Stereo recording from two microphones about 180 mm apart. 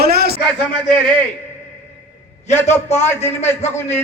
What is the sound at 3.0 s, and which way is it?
Speech, 40° left (ahead or behind).